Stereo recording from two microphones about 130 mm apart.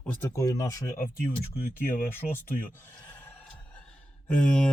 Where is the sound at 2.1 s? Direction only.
15° left (ahead or behind).